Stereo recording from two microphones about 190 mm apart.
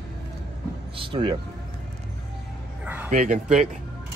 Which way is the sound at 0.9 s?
25° right (ahead or behind).